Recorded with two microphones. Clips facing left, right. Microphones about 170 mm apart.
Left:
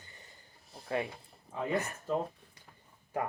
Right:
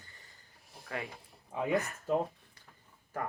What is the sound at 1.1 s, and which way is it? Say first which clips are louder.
Speech: even; 10° right (ahead or behind).